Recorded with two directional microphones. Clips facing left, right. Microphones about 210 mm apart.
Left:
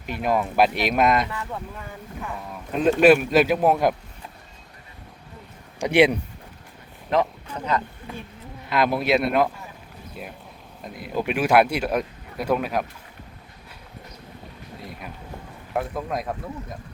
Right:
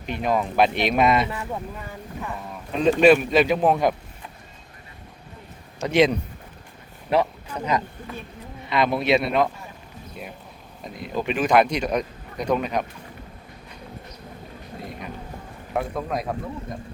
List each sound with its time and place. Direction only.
0.0 s speech: 5° left (ahead or behind)
1.3 s speech: 20° right (ahead or behind)
2.2 s speech: centre (ahead or behind)
5.8 s speech: 10° left (ahead or behind)
7.1 s speech: 10° right (ahead or behind)
8.6 s speech: centre (ahead or behind)
10.8 s speech: 5° left (ahead or behind)
14.8 s speech: centre (ahead or behind)